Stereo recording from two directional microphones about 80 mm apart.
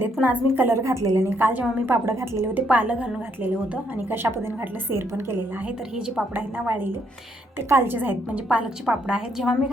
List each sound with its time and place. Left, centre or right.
0.0 s a woman's voice: right
0.8 s a woman's voice: right
1.4 s a woman's voice: right
2.6 s a woman's voice: centre
3.9 s a woman's voice: right
8.4 s a woman's voice: centre